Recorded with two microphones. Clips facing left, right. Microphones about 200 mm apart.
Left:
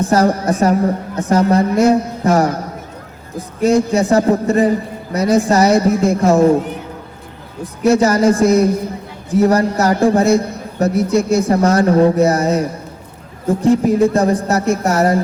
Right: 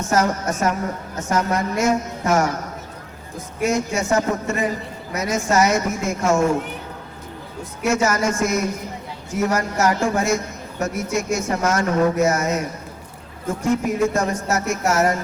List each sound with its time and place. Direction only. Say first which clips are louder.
0.0 s a man's voice: left 6 dB; 35° left (ahead or behind)
7.6 s a man's voice: left 8 dB; 35° left (ahead or behind)